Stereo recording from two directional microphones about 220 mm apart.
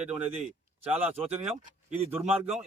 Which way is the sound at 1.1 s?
25° right (ahead or behind).